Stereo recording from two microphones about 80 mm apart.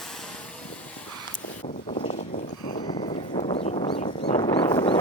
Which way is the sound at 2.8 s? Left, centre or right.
Left.